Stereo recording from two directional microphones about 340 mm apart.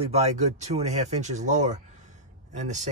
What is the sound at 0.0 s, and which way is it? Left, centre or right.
Speech, centre.